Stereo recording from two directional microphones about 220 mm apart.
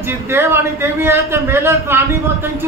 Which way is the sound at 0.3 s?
10° right (ahead or behind).